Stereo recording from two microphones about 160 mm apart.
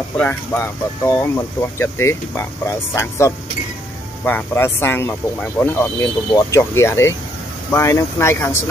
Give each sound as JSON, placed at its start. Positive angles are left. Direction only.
{"t": 0.2, "sound": "speech", "side_deg": 10}